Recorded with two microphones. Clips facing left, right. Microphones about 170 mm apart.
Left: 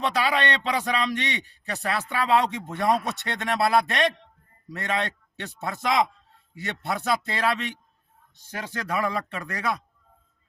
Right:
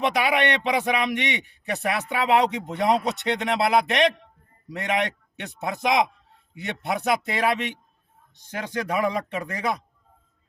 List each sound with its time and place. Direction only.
0.0 s a man's voice: 15° right (ahead or behind)